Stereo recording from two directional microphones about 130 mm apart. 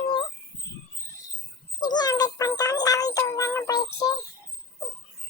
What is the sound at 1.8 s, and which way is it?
Music, 30° left (ahead or behind).